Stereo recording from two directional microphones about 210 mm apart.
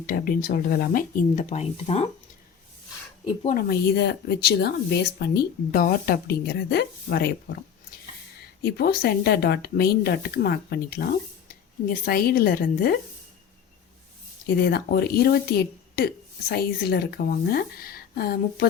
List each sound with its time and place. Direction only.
0.0 s speech: 45° left (ahead or behind)
3.4 s speech: 45° left (ahead or behind)
8.6 s speech: 50° left (ahead or behind)
14.5 s speech: 50° left (ahead or behind)